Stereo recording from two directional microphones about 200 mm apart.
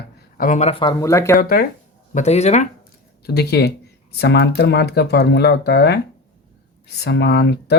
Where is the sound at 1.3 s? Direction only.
45° left (ahead or behind).